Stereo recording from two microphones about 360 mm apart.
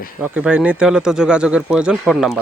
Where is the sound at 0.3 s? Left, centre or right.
Centre.